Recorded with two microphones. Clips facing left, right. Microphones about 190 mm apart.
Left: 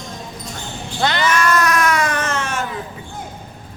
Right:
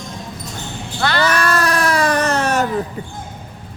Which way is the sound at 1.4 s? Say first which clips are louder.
Left 1 dB; 35° right (ahead or behind).